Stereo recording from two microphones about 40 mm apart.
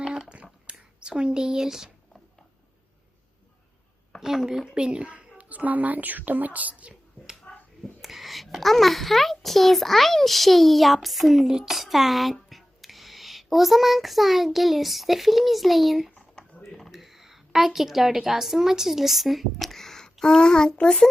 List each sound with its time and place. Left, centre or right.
0.7 s speech: right
4.2 s a woman's voice: centre; by 6.9 s right
7.5 s a sound: left
8.0 s a child's voice: centre
16.4 s a sound: centre
16.9 s a woman's voice: centre
19.7 s a child's voice: centre